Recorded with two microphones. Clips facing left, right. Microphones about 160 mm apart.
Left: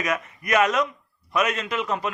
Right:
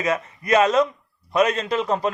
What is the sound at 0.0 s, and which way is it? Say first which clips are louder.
A man's voice: right 3 dB; 30° right (ahead or behind).